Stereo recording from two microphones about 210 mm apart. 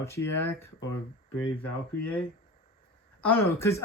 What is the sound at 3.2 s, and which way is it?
Speech, 10° left (ahead or behind).